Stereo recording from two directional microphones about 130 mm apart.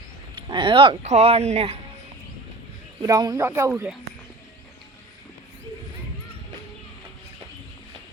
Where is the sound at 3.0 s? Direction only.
30° right (ahead or behind).